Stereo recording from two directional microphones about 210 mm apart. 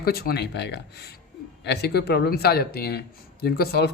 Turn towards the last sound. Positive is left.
turn(degrees=50)  # may be behind; listen again after turning